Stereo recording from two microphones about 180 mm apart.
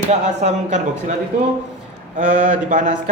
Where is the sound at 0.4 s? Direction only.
40° right (ahead or behind).